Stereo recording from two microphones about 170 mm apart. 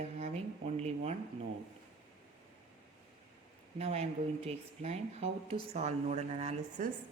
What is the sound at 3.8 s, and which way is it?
A woman's voice, 35° right (ahead or behind).